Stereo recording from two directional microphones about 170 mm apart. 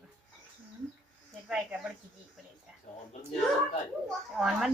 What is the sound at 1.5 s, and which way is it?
Speech, centre (ahead or behind).